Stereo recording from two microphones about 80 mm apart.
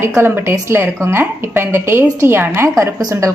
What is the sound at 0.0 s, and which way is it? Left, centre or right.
A woman's voice, right.